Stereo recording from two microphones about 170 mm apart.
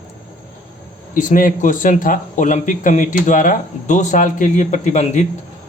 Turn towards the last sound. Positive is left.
turn(degrees=40)  # may be behind; listen again after turning